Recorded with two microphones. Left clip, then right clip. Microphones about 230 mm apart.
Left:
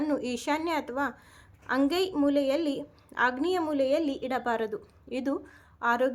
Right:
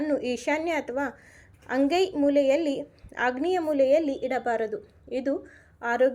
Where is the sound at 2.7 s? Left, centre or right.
Centre.